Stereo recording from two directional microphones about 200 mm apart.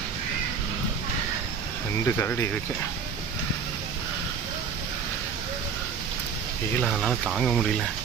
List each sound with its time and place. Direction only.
2.0 s speech: 10° left (ahead or behind)
6.8 s speech: centre (ahead or behind)